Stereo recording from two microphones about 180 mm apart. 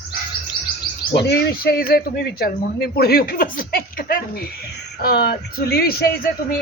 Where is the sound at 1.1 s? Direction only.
65° left (ahead or behind).